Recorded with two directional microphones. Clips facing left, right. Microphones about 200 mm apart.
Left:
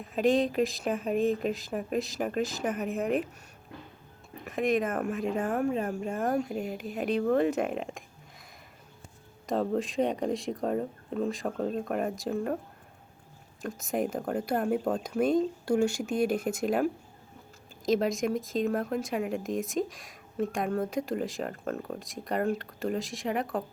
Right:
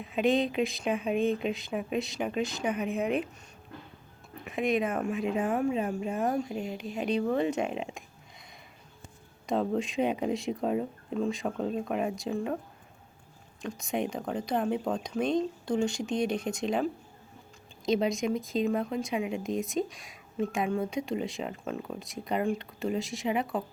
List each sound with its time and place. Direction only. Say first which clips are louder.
0.0 s speech: left 1 dB; centre (ahead or behind)
4.4 s speech: left 1 dB; centre (ahead or behind)
9.5 s speech: even; centre (ahead or behind)
13.6 s speech: left 1 dB; 5° left (ahead or behind)